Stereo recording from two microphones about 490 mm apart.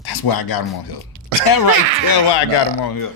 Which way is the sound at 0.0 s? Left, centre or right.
Left.